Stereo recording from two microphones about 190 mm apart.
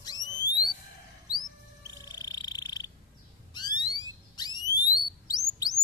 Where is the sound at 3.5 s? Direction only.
20° left (ahead or behind).